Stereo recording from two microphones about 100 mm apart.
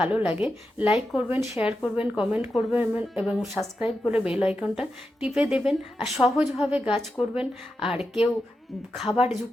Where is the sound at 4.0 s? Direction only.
10° right (ahead or behind).